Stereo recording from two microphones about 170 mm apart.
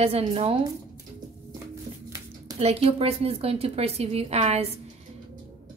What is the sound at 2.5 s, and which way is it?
A woman's voice, 35° right (ahead or behind).